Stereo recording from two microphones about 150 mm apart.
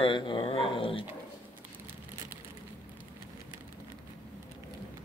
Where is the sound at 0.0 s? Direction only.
35° left (ahead or behind).